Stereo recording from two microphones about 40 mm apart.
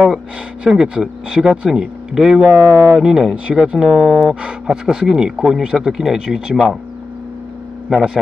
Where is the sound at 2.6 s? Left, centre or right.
Right.